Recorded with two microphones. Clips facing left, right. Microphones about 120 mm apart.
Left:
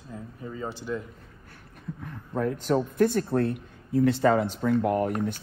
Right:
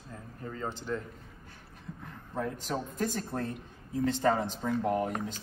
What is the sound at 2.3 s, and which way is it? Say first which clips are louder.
Speech: left 8 dB; 55° left (ahead or behind).